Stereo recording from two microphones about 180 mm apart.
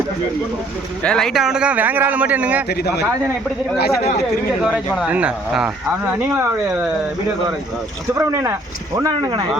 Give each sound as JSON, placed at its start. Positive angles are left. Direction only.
{"t": 1.0, "sound": "speech", "side_deg": 5}
{"t": 2.6, "sound": "speech", "side_deg": 65}
{"t": 4.6, "sound": "speech", "side_deg": -5}
{"t": 8.2, "sound": "speech", "side_deg": -15}